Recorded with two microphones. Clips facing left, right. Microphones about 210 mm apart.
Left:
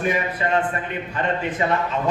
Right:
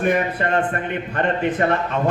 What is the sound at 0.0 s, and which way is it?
A man's voice, 55° right (ahead or behind).